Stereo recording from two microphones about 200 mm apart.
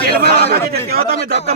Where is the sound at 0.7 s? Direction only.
50° right (ahead or behind).